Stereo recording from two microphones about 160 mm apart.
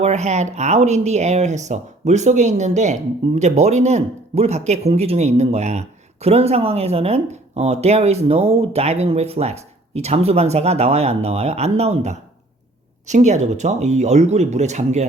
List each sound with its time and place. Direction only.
0.0 s speech: 45° right (ahead or behind)